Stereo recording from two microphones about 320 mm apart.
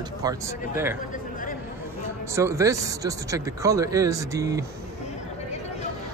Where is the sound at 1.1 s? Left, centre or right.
Left.